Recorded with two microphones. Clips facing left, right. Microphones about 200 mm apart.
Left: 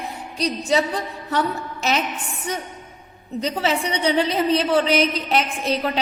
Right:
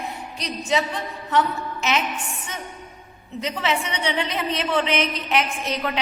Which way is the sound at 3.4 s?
35° left (ahead or behind).